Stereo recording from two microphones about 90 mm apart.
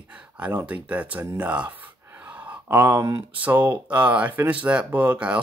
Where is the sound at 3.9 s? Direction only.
15° right (ahead or behind).